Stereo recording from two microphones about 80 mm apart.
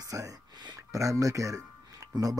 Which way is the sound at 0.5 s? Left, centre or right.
Right.